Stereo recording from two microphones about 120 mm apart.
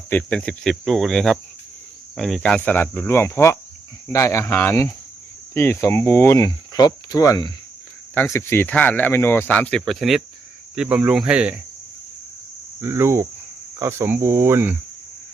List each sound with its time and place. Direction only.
0.1 s cricket: 10° left (ahead or behind)
2.1 s speech: 5° left (ahead or behind); by 7.5 s 30° left (ahead or behind)
8.1 s speech: 20° left (ahead or behind); by 11.6 s 10° right (ahead or behind)
12.8 s cricket: 20° right (ahead or behind)